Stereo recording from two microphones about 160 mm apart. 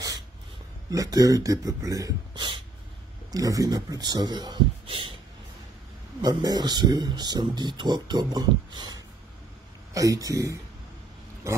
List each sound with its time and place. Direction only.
0.8 s speech: 20° right (ahead or behind)
6.2 s speech: 25° right (ahead or behind)